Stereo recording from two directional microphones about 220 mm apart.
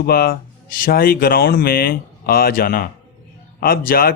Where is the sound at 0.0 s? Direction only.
45° left (ahead or behind).